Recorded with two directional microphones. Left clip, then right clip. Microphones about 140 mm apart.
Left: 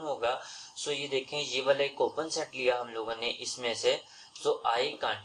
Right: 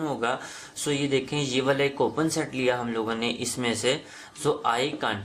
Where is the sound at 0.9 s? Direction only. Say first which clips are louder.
Right 7 dB; 45° right (ahead or behind).